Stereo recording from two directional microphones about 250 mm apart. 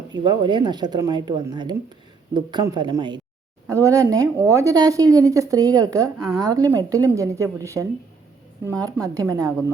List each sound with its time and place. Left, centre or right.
0.1 s a woman's voice: centre